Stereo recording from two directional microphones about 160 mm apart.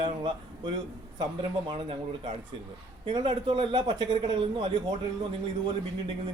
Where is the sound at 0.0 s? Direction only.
30° right (ahead or behind).